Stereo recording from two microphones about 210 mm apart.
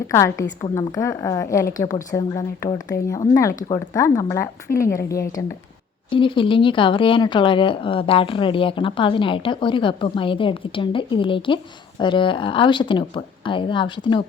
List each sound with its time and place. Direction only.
0.1 s speech: 15° left (ahead or behind)